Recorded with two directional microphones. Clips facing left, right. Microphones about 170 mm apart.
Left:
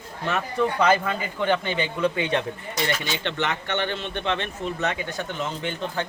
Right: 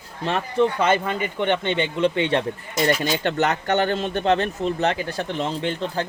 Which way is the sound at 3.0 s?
45° right (ahead or behind).